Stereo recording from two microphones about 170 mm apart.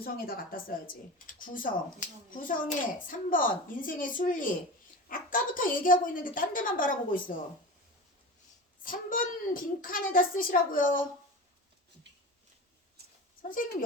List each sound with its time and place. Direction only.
0.0 s a child's voice: 60° left (ahead or behind)
8.8 s a child's voice: 55° left (ahead or behind)